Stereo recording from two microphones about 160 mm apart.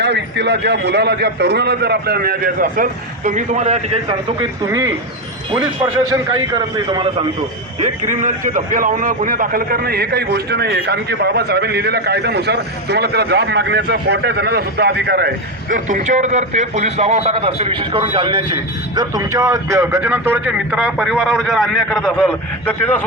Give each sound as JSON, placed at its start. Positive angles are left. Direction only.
{"t": 0.0, "sound": "a man's voice", "side_deg": -90}
{"t": 4.6, "sound": "a man's voice", "side_deg": -20}
{"t": 7.8, "sound": "a man's voice", "side_deg": -50}
{"t": 15.7, "sound": "a man's voice", "side_deg": -55}